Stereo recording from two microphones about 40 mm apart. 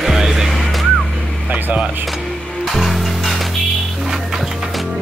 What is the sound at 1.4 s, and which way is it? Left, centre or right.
Speech, right.